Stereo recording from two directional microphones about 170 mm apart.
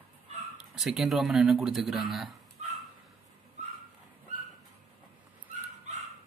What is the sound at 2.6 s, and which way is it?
Dog, 40° right (ahead or behind).